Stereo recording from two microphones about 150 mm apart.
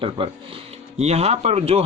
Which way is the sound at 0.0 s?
35° right (ahead or behind).